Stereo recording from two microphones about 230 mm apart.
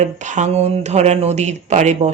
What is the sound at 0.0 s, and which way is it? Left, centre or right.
Speech, right.